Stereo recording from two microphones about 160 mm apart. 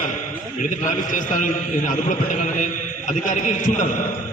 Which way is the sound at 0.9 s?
50° left (ahead or behind).